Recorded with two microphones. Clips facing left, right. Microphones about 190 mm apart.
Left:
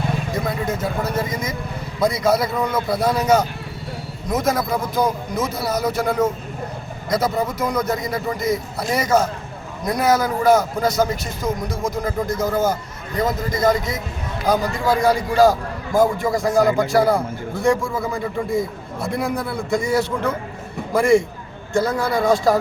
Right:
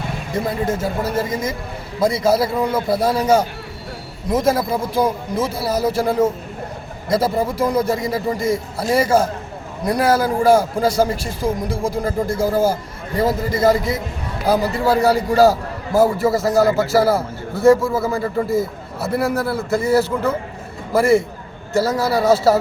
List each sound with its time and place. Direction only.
0.4 s a man's voice: 25° right (ahead or behind)
14.4 s a man's voice: 5° right (ahead or behind)